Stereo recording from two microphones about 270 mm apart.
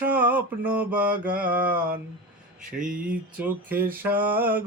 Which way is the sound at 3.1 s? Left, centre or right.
Centre.